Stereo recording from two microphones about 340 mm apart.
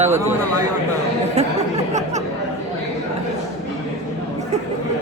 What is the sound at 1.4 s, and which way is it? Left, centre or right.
Chatter, centre.